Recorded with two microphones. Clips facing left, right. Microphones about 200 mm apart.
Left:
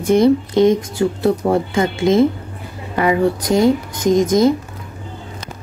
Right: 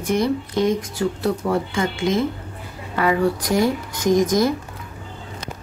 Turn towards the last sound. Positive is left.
turn(degrees=20)  # may be behind; listen again after turning